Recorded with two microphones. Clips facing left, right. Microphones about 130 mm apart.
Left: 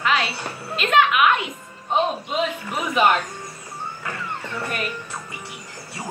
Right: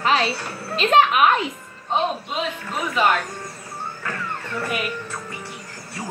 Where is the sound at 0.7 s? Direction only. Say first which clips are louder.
Right 2 dB; 35° right (ahead or behind).